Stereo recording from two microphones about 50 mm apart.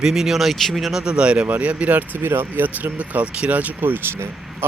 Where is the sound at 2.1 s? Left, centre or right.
Right.